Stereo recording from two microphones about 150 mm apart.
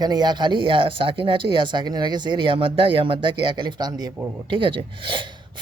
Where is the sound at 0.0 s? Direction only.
25° right (ahead or behind).